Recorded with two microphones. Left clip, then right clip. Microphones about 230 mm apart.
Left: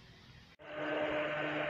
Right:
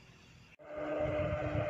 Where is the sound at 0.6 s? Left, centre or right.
Right.